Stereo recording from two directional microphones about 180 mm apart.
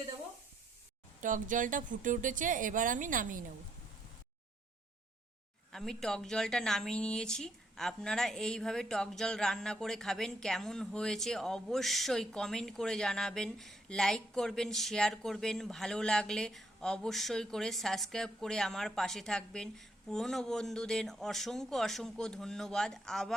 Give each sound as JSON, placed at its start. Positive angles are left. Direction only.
{"t": 1.2, "sound": "a woman's voice", "side_deg": -45}
{"t": 5.7, "sound": "a woman's voice", "side_deg": 0}